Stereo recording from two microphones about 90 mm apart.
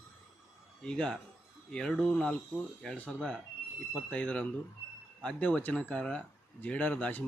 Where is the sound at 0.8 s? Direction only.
10° left (ahead or behind).